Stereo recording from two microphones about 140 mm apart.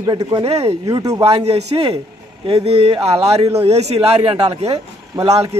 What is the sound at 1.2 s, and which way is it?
A man's voice, 45° right (ahead or behind).